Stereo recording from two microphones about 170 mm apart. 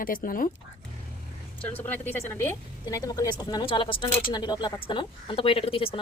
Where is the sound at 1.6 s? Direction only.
10° left (ahead or behind); by 5.9 s 35° left (ahead or behind).